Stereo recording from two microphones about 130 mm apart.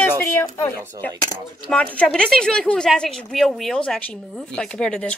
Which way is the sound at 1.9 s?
5° left (ahead or behind).